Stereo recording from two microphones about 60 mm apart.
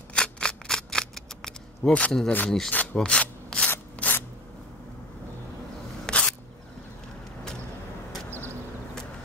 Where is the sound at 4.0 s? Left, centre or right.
Left.